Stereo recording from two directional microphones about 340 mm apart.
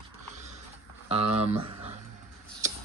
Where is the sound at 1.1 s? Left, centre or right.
Centre.